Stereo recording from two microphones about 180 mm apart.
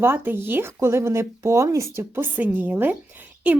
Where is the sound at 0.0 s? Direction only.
10° right (ahead or behind).